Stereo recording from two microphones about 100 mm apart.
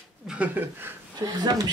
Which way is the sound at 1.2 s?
40° right (ahead or behind).